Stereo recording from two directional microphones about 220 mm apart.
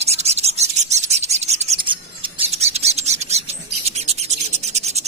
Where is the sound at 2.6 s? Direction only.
30° right (ahead or behind).